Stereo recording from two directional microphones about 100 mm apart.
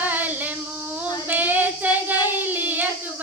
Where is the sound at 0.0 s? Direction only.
15° right (ahead or behind).